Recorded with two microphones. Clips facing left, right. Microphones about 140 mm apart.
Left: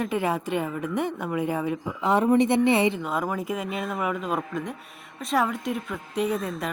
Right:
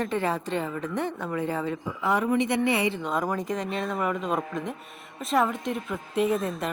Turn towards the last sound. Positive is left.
turn(degrees=0)  # may be behind; listen again after turning